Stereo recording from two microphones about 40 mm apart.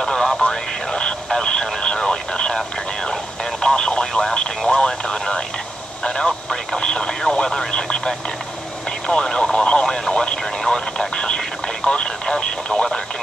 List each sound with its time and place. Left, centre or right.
0.0 s radio: centre
3.6 s radio: left
4.6 s a sound: centre
6.0 s vehicle: centre
7.4 s speech: centre
10.0 s a sound: left
10.6 s radio: centre